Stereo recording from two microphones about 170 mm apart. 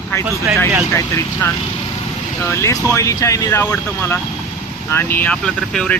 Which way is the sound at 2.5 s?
15° left (ahead or behind).